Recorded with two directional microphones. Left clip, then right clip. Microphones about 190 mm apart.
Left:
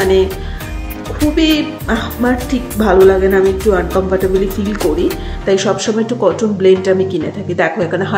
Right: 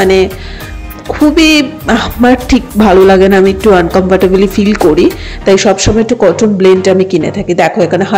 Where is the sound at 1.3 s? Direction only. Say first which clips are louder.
Right 5 dB; 45° right (ahead or behind).